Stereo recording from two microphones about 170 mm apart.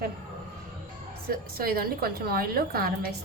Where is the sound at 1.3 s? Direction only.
60° right (ahead or behind).